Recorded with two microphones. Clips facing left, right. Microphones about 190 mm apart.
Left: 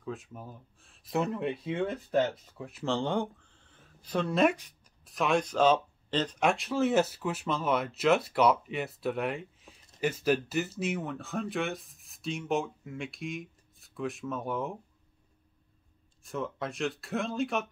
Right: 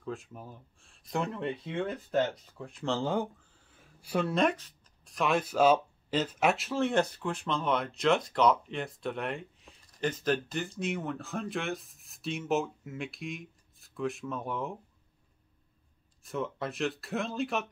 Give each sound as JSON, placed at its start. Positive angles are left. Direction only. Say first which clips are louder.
{"t": 0.0, "sound": "speech", "louder": "even", "side_deg": 0}
{"t": 4.4, "sound": "speech", "louder": "left 2 dB", "side_deg": 10}
{"t": 16.3, "sound": "speech", "louder": "right 1 dB", "side_deg": 0}